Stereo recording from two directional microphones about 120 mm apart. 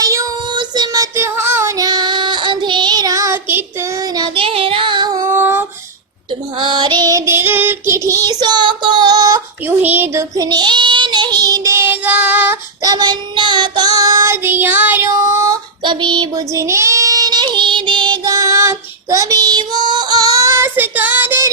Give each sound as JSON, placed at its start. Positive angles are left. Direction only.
{"t": 0.0, "sound": "child singing", "side_deg": -25}
{"t": 0.5, "sound": "child singing", "side_deg": -35}
{"t": 1.1, "sound": "child singing", "side_deg": -20}
{"t": 1.8, "sound": "child singing", "side_deg": -35}
{"t": 4.1, "sound": "child singing", "side_deg": -40}
{"t": 5.2, "sound": "female singing", "side_deg": -15}
{"t": 6.6, "sound": "child singing", "side_deg": -40}
{"t": 9.6, "sound": "a sound", "side_deg": -15}
{"t": 10.3, "sound": "child singing", "side_deg": -35}
{"t": 12.8, "sound": "child singing", "side_deg": -35}
{"t": 15.8, "sound": "child singing", "side_deg": -40}
{"t": 16.6, "sound": "child singing", "side_deg": -25}